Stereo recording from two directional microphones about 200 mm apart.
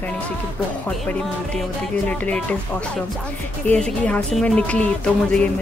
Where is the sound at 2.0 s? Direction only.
5° left (ahead or behind).